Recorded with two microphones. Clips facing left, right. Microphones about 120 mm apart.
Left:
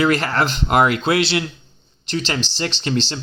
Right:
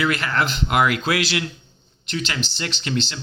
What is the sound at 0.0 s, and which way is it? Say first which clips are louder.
Speech: left 4 dB; 35° left (ahead or behind).